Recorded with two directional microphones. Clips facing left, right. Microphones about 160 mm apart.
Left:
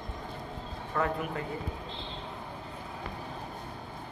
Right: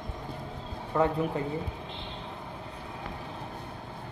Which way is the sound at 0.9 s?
20° right (ahead or behind).